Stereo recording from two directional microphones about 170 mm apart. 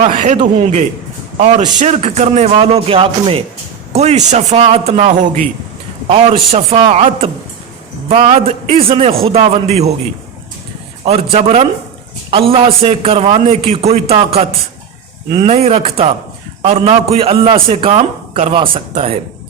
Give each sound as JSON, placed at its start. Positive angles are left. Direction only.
{"t": 0.0, "sound": "a man's voice", "side_deg": -45}
{"t": 6.5, "sound": "a man's voice", "side_deg": -30}
{"t": 11.0, "sound": "a man's voice", "side_deg": -35}
{"t": 15.4, "sound": "a man's voice", "side_deg": -40}